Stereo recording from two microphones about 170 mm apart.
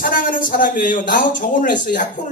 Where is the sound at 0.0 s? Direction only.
55° left (ahead or behind).